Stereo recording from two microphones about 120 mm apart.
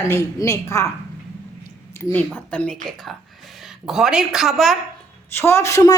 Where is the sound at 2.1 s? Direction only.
15° left (ahead or behind).